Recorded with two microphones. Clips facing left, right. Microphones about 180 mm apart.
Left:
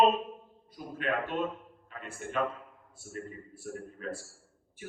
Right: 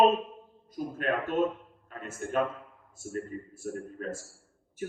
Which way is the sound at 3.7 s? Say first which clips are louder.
Right 1 dB; 45° right (ahead or behind).